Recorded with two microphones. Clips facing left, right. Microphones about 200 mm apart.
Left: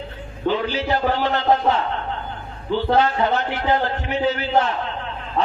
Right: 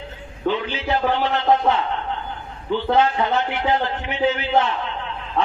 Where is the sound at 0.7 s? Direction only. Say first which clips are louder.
Left 1 dB; 35° left (ahead or behind).